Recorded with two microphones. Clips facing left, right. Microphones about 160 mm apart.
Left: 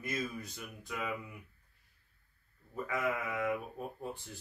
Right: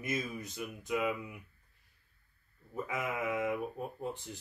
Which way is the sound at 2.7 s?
20° right (ahead or behind).